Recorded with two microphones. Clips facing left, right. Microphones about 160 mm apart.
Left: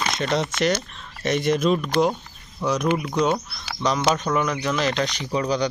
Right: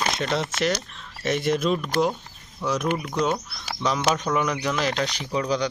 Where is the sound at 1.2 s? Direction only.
Centre (ahead or behind).